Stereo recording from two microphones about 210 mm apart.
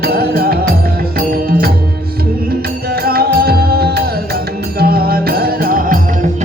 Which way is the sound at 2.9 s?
45° right (ahead or behind).